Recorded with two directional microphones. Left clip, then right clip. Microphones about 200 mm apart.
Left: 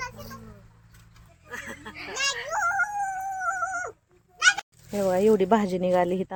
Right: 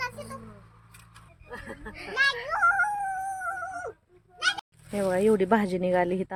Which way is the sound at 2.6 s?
50° left (ahead or behind).